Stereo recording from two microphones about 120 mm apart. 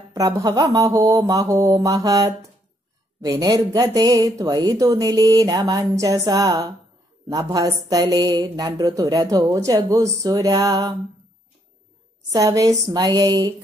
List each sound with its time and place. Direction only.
0.1 s speech: 30° right (ahead or behind)
12.3 s speech: 30° right (ahead or behind)